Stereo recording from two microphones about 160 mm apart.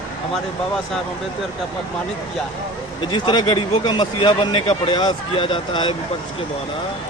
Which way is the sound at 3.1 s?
25° left (ahead or behind).